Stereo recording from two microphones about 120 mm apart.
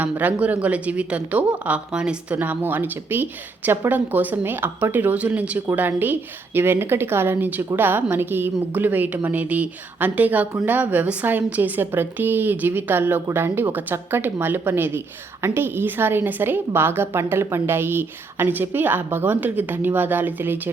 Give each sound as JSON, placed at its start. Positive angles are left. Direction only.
{"t": 0.0, "sound": "a woman's voice", "side_deg": -15}